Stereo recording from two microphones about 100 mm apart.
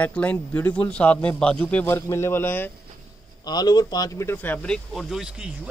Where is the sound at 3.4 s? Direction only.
45° left (ahead or behind).